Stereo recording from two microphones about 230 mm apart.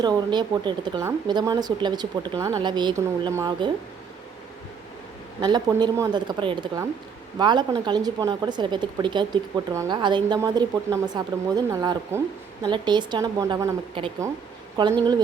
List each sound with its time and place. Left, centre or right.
0.0 s speech: centre
5.4 s speech: centre